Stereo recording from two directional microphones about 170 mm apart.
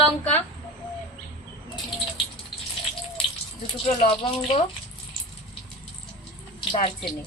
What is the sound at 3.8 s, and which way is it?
Speech, 35° left (ahead or behind).